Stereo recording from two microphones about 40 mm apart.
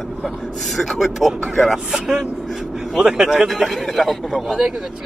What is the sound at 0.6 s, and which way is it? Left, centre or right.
A man's voice, centre.